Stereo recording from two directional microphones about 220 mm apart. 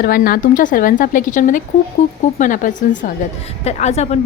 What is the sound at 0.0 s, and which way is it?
A woman's voice, 40° left (ahead or behind).